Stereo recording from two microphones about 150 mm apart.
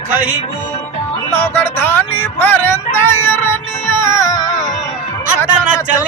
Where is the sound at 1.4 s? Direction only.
10° left (ahead or behind).